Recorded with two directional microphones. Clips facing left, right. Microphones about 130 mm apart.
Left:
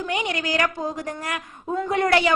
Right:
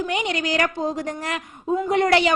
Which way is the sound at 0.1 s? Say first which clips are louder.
Right 1 dB; 20° right (ahead or behind).